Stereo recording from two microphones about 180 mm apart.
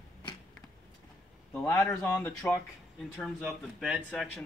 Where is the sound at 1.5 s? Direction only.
5° left (ahead or behind).